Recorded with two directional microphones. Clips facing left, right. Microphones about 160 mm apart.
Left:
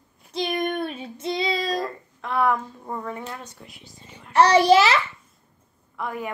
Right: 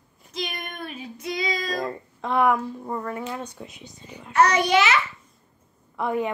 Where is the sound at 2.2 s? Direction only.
20° right (ahead or behind).